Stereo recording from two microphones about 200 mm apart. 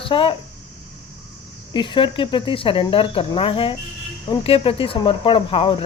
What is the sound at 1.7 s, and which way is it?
Speech, 25° left (ahead or behind).